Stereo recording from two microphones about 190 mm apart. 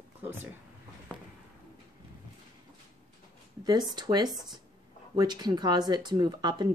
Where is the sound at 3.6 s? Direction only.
20° right (ahead or behind).